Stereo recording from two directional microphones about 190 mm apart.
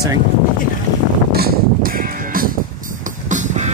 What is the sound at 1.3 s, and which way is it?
Music, 50° right (ahead or behind).